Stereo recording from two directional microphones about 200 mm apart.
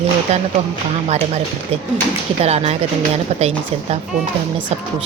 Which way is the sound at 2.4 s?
30° right (ahead or behind).